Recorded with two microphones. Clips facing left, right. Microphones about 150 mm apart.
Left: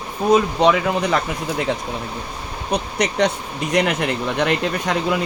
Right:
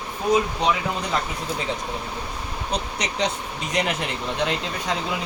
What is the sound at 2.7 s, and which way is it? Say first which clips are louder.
Speech: left 7 dB; 60° left (ahead or behind).